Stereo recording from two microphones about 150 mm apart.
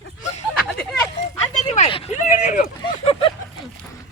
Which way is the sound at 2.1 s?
60° left (ahead or behind).